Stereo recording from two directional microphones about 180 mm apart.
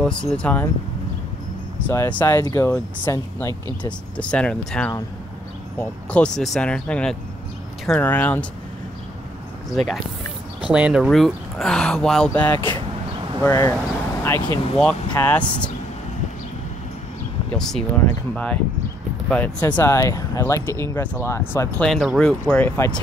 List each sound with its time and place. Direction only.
0.0 s speech: 5° left (ahead or behind)
1.8 s speech: 10° left (ahead or behind)
10.6 s speech: 5° right (ahead or behind)
17.6 s speech: 5° left (ahead or behind)
21.8 s speech: centre (ahead or behind)